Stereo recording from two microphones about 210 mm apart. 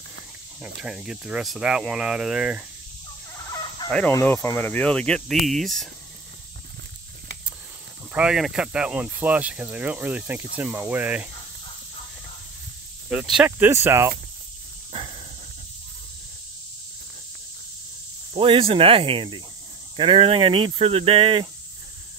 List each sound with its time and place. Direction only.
0.8 s speech: 5° right (ahead or behind)
3.9 s speech: 10° left (ahead or behind)
8.1 s speech: 5° right (ahead or behind)
13.1 s speech: centre (ahead or behind)
14.9 s a sound: 25° right (ahead or behind)
18.3 s speech: 25° right (ahead or behind)